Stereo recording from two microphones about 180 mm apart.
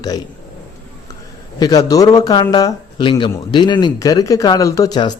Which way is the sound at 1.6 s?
20° left (ahead or behind).